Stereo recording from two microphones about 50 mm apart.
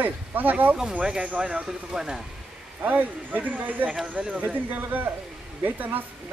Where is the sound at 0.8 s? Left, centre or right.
Centre.